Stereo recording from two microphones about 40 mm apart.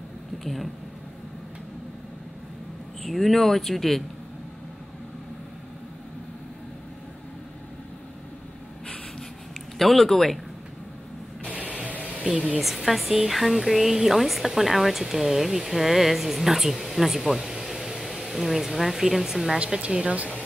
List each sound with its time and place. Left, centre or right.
0.4 s speech: centre
3.0 s speech: centre
9.8 s speech: centre
11.5 s a sound: right
12.5 s speech: centre
19.6 s speech: right